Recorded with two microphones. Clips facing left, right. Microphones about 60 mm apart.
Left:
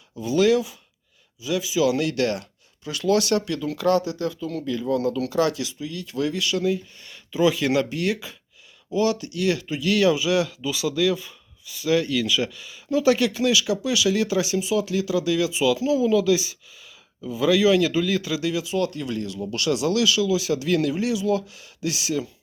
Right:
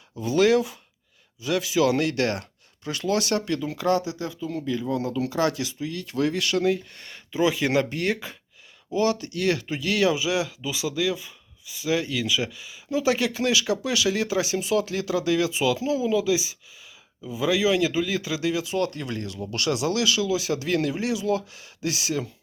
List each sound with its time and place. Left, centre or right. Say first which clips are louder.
0.2 s speech: even; right
7.1 s speech: left 3 dB; right
16.0 s speech: left 3 dB; centre; by 22.3 s right